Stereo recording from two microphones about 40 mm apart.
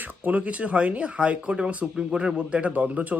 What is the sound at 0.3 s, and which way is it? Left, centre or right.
Speech, right.